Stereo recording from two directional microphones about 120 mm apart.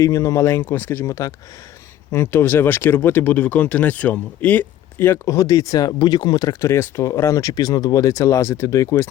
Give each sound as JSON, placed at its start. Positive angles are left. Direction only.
{"t": 0.0, "sound": "speech", "side_deg": 25}